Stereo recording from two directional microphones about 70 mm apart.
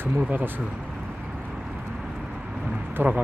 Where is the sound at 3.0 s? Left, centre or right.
Right.